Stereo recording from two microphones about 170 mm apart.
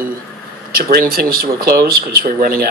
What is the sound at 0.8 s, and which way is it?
Speech, 60° right (ahead or behind).